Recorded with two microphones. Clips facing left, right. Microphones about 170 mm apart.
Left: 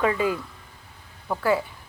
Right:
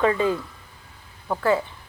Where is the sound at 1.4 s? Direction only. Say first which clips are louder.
Right 1 dB; 10° left (ahead or behind).